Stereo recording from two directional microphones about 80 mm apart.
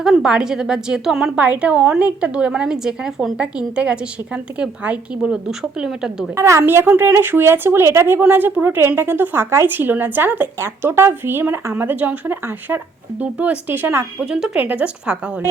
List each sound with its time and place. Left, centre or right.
0.0 s a woman's voice: centre
6.3 s a woman's voice: right; by 13.6 s centre
13.7 s speech: right
14.3 s a woman's voice: centre